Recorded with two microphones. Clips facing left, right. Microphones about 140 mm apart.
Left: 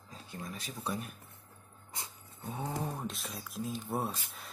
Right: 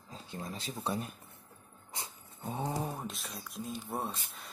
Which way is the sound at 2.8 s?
5° right (ahead or behind).